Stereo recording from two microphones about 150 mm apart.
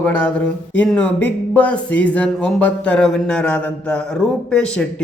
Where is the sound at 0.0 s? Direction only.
10° left (ahead or behind).